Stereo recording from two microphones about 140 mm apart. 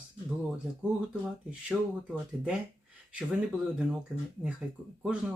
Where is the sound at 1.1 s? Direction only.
5° right (ahead or behind).